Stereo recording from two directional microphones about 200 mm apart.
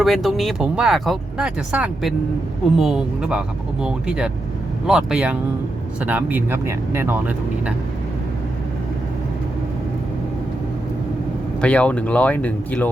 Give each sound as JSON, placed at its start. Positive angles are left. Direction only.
{"t": 0.0, "sound": "speech", "side_deg": 0}
{"t": 11.6, "sound": "speech", "side_deg": 5}